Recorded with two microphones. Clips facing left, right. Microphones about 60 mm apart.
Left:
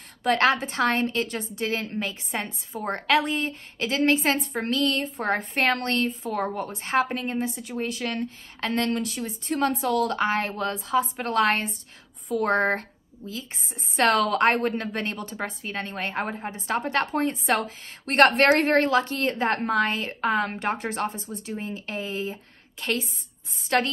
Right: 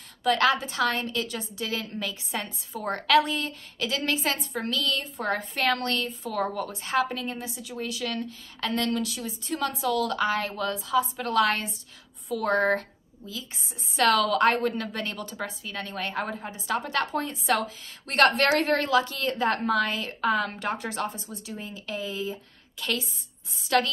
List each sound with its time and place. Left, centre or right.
0.2 s a woman's voice: left
13.9 s a woman's voice: left